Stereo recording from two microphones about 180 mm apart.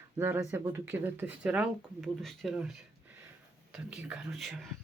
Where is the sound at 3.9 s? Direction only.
5° right (ahead or behind).